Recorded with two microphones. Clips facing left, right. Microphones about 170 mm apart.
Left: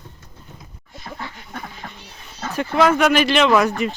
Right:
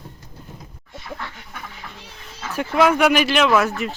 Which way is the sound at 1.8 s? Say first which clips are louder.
Left 2 dB; 45° left (ahead or behind).